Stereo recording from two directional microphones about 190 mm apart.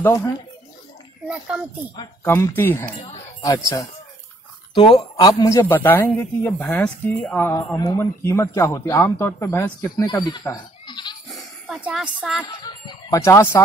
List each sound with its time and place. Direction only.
0.0 s a man's voice: 10° left (ahead or behind)
1.2 s a child's voice: 5° right (ahead or behind)
2.2 s a man's voice: 15° left (ahead or behind)
3.0 s a man's voice: 25° left (ahead or behind)
10.5 s goat: 25° left (ahead or behind)
11.3 s speech: 5° right (ahead or behind)
12.6 s a man's voice: 20° left (ahead or behind)